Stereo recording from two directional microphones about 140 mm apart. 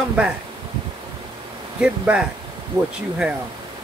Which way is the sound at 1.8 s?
10° right (ahead or behind).